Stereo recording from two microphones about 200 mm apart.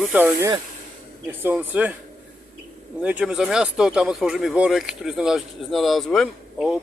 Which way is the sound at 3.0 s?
5° right (ahead or behind).